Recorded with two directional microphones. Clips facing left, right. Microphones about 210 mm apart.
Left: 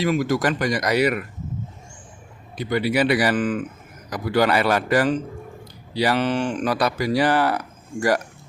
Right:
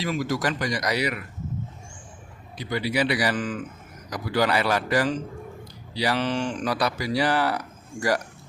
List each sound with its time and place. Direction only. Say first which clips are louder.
0.0 s speech: left 5 dB; 55° left (ahead or behind)
2.6 s speech: left 5 dB; 55° left (ahead or behind)